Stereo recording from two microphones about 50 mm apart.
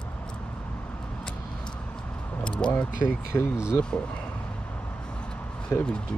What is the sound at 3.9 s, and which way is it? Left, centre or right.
Speech, centre.